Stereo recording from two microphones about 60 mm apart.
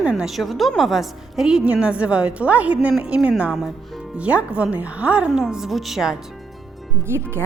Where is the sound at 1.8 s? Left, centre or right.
Centre.